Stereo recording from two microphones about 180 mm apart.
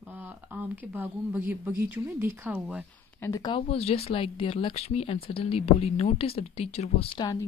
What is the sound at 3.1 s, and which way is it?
Speech, 15° left (ahead or behind).